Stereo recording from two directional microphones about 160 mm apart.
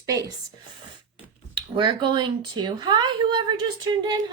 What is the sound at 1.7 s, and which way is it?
A woman's voice, 30° right (ahead or behind).